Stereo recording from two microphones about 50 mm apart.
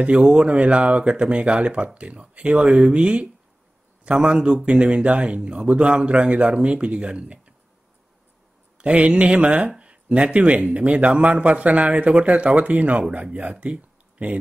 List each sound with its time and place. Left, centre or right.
0.0 s speech: right
8.7 s speech: right